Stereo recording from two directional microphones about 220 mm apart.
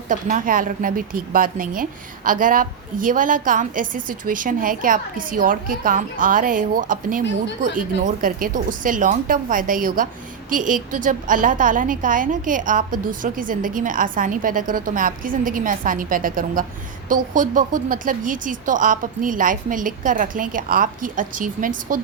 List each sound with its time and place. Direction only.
0.1 s a woman's voice: 35° right (ahead or behind)